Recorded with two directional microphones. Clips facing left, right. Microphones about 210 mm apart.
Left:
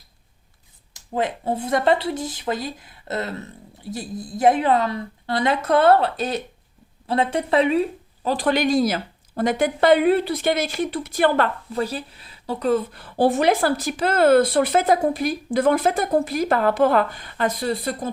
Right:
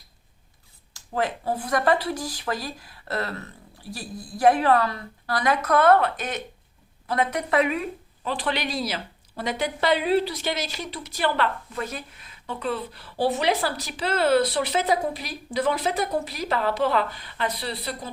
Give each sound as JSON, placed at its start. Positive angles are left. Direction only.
{"t": 0.9, "sound": "a woman's voice", "side_deg": 20}
{"t": 11.7, "sound": "a woman's voice", "side_deg": 35}